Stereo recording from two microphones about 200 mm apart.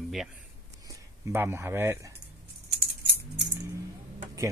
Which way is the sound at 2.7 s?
55° right (ahead or behind).